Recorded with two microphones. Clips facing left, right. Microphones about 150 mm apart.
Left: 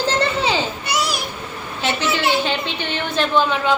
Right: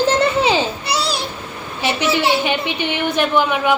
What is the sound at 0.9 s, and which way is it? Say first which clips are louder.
Babbling: right 2 dB; 30° right (ahead or behind).